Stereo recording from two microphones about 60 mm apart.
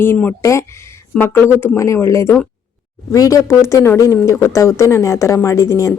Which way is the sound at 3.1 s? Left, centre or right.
Left.